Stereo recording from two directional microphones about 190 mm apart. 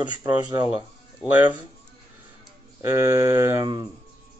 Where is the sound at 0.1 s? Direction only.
20° right (ahead or behind).